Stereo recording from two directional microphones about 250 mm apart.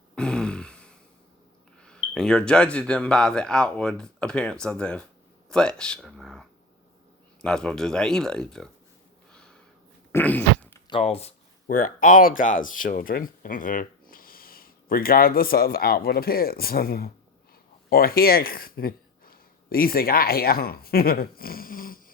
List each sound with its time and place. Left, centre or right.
0.2 s a sound: centre
1.8 s speech: centre
7.4 s speech: centre
9.3 s a sound: centre
10.1 s dog: centre
10.8 s speech: left